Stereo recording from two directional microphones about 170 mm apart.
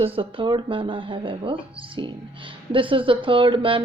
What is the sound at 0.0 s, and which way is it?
Speech, 30° right (ahead or behind).